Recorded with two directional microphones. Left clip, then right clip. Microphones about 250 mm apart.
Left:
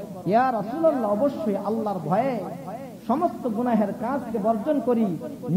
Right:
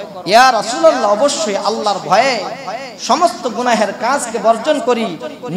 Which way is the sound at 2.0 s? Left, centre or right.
Centre.